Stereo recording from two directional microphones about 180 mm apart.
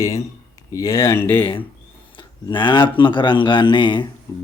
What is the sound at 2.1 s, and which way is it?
Speech, 25° left (ahead or behind).